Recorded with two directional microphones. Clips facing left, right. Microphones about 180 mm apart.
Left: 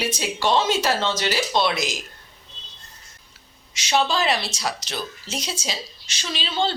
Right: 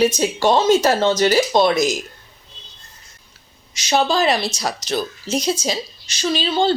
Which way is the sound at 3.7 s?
40° right (ahead or behind).